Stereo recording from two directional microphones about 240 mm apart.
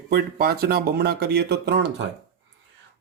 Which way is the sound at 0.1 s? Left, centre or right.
Right.